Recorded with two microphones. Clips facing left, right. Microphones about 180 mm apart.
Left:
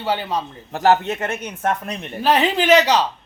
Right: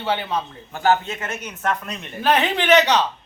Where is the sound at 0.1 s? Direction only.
40° left (ahead or behind).